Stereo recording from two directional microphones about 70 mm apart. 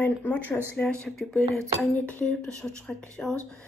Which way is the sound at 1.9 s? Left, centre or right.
Left.